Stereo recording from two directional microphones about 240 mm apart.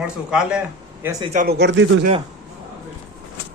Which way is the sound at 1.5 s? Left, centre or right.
Right.